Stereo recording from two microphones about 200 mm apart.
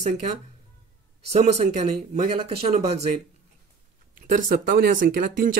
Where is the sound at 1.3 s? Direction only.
35° right (ahead or behind).